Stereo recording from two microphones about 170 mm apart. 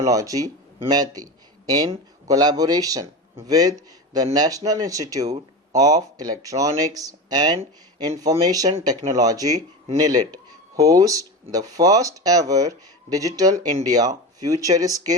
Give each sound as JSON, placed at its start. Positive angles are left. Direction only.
{"t": 0.0, "sound": "speech", "side_deg": -20}